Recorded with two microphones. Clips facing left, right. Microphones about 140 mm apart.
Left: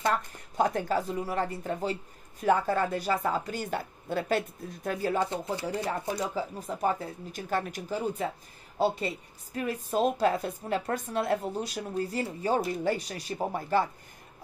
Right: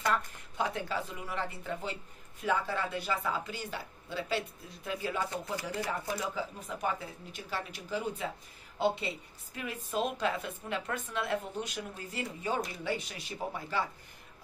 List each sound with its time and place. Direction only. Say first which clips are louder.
0.1 s a woman's voice: left 2 dB; 45° left (ahead or behind)
5.2 s speech: left 5 dB; 25° left (ahead or behind)
6.3 s a woman's voice: left 5 dB; 40° left (ahead or behind)